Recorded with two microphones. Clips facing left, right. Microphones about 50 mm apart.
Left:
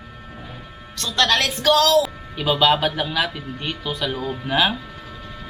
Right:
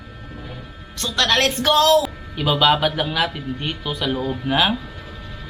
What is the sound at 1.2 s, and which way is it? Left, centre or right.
Speech, right.